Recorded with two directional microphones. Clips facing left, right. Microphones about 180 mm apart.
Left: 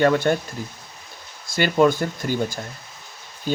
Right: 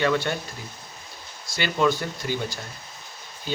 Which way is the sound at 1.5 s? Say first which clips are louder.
Left 5 dB; 50° left (ahead or behind).